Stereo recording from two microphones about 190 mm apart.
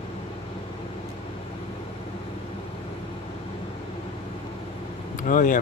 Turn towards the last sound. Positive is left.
turn(degrees=45)  # may be behind; listen again after turning